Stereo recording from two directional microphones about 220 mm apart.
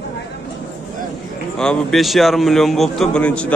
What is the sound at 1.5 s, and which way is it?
A man's voice, 5° left (ahead or behind).